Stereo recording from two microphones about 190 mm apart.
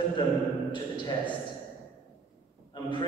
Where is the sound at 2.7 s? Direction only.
25° left (ahead or behind).